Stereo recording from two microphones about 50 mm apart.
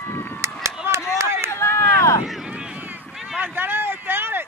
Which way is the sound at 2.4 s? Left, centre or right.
Centre.